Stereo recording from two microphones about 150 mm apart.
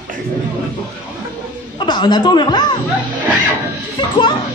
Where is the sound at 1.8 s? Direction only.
30° left (ahead or behind).